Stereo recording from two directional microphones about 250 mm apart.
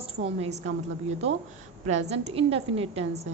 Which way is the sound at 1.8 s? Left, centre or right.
Right.